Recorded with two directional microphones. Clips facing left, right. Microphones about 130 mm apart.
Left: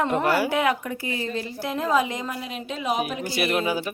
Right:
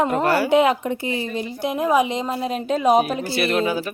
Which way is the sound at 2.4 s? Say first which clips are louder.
Right 9 dB; 40° right (ahead or behind).